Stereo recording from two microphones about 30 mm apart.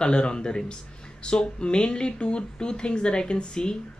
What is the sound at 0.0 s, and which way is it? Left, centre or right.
Speech, left.